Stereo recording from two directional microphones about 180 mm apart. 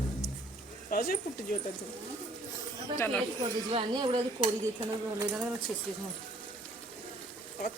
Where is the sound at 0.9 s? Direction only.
55° left (ahead or behind).